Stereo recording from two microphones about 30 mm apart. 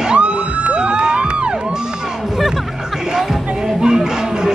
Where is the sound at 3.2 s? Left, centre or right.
Centre.